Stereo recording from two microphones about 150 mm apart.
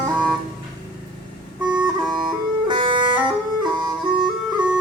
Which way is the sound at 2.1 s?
30° right (ahead or behind).